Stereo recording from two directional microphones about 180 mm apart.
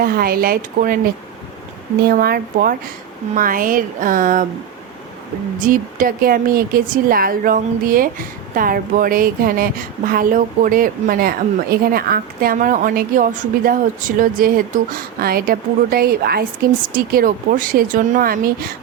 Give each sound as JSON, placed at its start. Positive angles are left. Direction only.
{"t": 0.0, "sound": "speech", "side_deg": -55}
{"t": 2.0, "sound": "speech", "side_deg": -55}
{"t": 5.5, "sound": "speech", "side_deg": -50}